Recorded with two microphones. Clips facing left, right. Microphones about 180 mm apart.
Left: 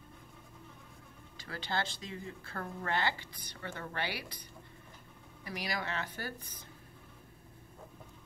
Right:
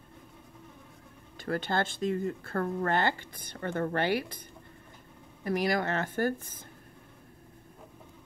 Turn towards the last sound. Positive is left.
turn(degrees=-50)  # may be behind; listen again after turning